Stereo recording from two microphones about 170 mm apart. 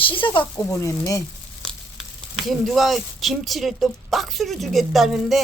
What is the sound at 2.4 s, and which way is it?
Speech, centre (ahead or behind).